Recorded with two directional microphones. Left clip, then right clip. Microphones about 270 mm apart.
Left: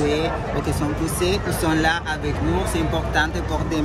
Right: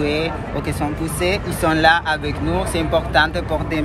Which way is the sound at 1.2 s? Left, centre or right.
Centre.